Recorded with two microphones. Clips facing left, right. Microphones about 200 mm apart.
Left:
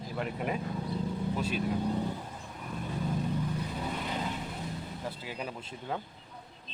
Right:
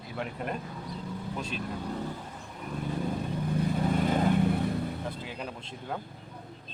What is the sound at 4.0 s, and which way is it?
Vehicle, 50° right (ahead or behind).